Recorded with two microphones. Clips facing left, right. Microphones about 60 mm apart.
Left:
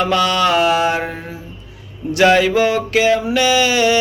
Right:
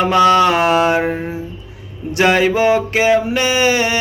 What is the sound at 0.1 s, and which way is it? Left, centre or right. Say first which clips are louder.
Mantra: right 4 dB; right.